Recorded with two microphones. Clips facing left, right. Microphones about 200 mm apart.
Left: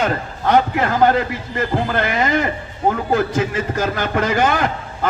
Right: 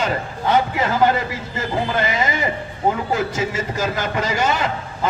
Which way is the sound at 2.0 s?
55° left (ahead or behind).